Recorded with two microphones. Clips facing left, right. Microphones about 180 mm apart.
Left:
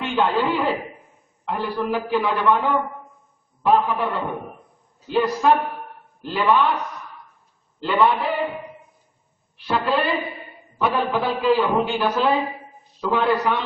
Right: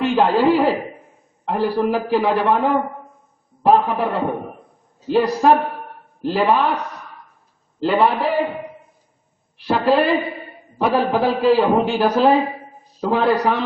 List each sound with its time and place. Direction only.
0.0 s a man's voice: 35° right (ahead or behind)
7.8 s a man's voice: 35° right (ahead or behind)
9.6 s a man's voice: 40° right (ahead or behind)